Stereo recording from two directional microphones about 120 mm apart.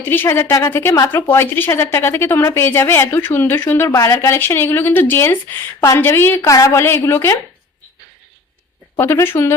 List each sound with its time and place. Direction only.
0.0 s a woman's voice: 20° left (ahead or behind)
9.0 s a woman's voice: 20° left (ahead or behind)